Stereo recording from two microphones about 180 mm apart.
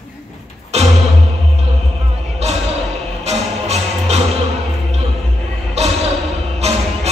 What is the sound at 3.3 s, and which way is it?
Music, 35° right (ahead or behind).